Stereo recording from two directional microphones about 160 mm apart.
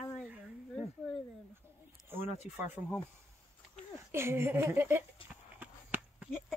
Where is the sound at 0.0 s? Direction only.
5° left (ahead or behind).